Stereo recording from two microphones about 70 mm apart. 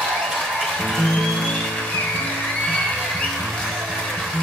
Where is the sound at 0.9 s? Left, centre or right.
Centre.